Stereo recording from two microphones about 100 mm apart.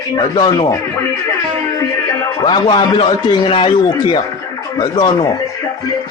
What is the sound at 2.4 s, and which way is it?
Speech, 55° left (ahead or behind).